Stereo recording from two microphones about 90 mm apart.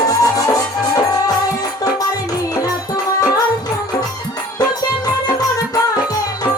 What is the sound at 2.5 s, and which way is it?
Music, 45° left (ahead or behind).